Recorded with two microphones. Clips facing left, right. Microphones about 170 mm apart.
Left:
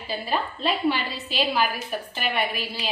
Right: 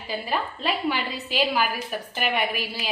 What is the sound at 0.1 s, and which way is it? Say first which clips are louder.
A woman's voice: left 1 dB; 15° right (ahead or behind).